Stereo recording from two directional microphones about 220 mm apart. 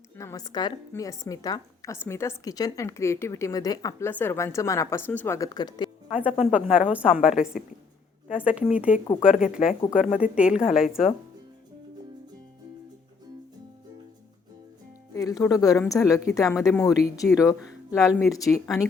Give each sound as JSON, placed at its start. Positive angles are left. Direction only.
{"t": 0.2, "sound": "a woman's voice", "side_deg": 15}
{"t": 6.1, "sound": "a woman's voice", "side_deg": -5}
{"t": 15.1, "sound": "a woman's voice", "side_deg": 15}
{"t": 17.9, "sound": "a woman's voice", "side_deg": 0}
{"t": 18.3, "sound": "a woman's voice", "side_deg": 15}